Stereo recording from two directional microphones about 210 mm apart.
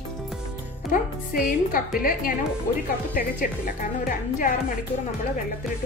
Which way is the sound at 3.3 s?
40° left (ahead or behind).